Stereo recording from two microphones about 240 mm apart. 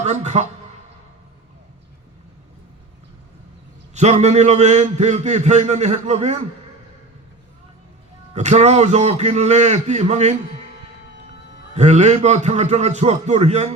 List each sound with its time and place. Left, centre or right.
0.0 s a man's voice: right
3.9 s a man's voice: right
8.4 s a man's voice: right
11.7 s a man's voice: right